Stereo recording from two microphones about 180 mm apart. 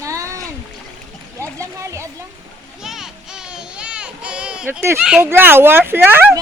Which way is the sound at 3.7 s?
5° right (ahead or behind).